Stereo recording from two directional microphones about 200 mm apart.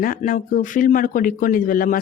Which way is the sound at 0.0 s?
45° left (ahead or behind).